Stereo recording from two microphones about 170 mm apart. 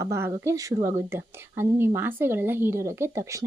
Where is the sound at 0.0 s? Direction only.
15° right (ahead or behind).